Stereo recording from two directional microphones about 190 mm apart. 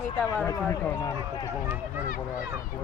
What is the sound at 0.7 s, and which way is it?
Speech, 20° left (ahead or behind).